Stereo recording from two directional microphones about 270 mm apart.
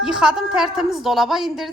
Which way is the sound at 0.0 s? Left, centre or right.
Centre.